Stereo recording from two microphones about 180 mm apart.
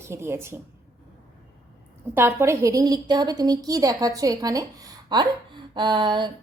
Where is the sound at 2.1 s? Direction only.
15° right (ahead or behind).